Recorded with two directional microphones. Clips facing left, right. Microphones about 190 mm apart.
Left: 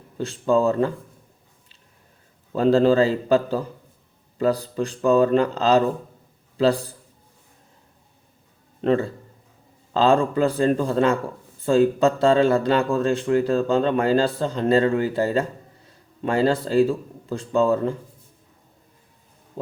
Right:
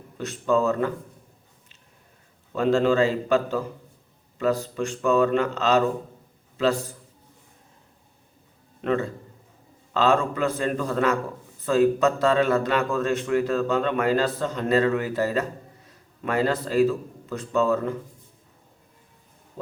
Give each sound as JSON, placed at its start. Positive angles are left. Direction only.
{"t": 0.2, "sound": "speech", "side_deg": 30}
{"t": 2.6, "sound": "speech", "side_deg": 35}
{"t": 8.8, "sound": "a man's voice", "side_deg": 30}